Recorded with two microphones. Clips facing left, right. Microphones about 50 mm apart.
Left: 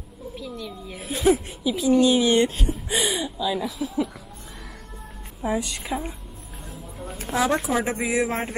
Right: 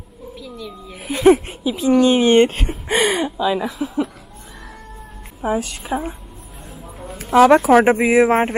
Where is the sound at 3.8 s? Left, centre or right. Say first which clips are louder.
Right 4 dB; right.